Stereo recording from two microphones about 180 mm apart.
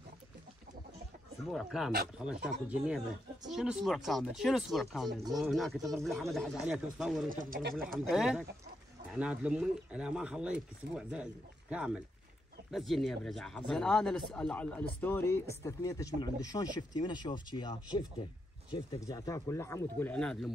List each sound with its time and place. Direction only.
1.5 s speech: centre (ahead or behind)
7.2 s speech: 50° right (ahead or behind)
7.9 s speech: centre (ahead or behind)